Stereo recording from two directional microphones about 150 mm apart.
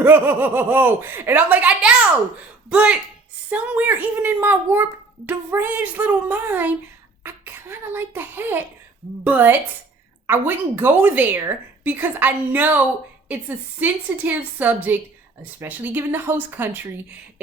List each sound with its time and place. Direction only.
0.0 s a child's voice: 15° right (ahead or behind)